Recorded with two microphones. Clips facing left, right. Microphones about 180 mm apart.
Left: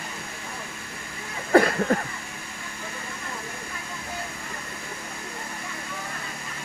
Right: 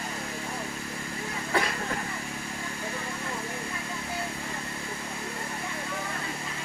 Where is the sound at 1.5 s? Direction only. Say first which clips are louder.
Left 11 dB; 50° left (ahead or behind).